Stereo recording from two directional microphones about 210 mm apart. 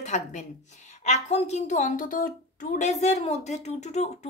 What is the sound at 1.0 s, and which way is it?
A woman's voice, 35° left (ahead or behind).